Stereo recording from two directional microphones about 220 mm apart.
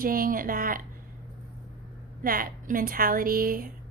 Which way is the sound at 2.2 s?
40° right (ahead or behind).